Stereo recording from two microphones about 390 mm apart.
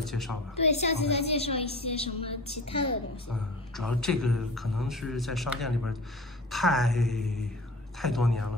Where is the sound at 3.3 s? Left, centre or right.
Centre.